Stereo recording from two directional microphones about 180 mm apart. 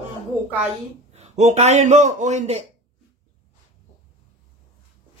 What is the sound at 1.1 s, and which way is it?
A man's voice, 40° right (ahead or behind).